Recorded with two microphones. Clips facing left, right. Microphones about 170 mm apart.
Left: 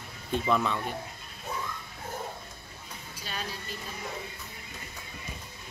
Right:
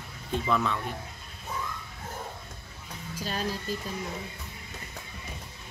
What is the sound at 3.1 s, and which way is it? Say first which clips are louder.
Speech: right 6 dB; 40° right (ahead or behind).